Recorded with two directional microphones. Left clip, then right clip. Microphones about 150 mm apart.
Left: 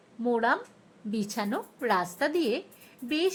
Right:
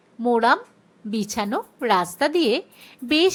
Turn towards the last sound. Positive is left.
turn(degrees=-25)  # may be behind; listen again after turning